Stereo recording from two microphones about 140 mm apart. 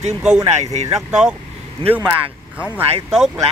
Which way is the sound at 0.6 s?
50° right (ahead or behind).